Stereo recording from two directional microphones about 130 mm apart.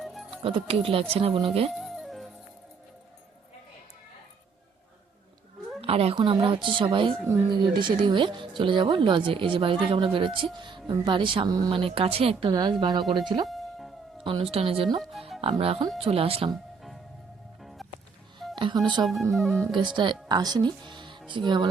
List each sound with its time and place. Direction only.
0.0 s music: centre (ahead or behind)
0.4 s speech: 45° right (ahead or behind)
1.7 s music: centre (ahead or behind)
5.8 s speech: 50° right (ahead or behind)
6.1 s speech: 40° right (ahead or behind)
11.7 s speech: 45° right (ahead or behind)
13.4 s music: centre (ahead or behind)
14.3 s speech: 45° right (ahead or behind)
17.6 s music: centre (ahead or behind)
18.5 s speech: 40° right (ahead or behind)
19.0 s speech: centre (ahead or behind)
19.7 s speech: 35° right (ahead or behind)